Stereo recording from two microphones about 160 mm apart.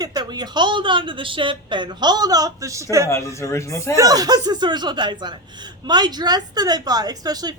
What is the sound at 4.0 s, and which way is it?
Speech, 25° right (ahead or behind).